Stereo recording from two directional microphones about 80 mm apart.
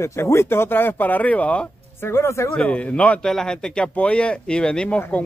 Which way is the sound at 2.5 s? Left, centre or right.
Centre.